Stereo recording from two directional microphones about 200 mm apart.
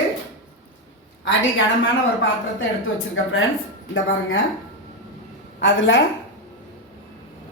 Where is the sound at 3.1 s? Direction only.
75° left (ahead or behind).